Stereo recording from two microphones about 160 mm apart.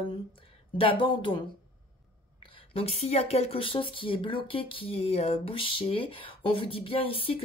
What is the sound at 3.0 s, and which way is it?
Speech, 40° left (ahead or behind).